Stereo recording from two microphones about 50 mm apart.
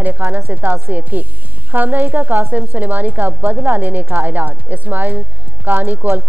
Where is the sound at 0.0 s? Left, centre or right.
Right.